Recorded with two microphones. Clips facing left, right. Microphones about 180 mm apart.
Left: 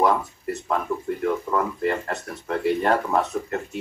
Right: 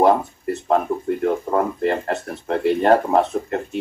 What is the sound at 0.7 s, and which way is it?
Speech, 35° right (ahead or behind).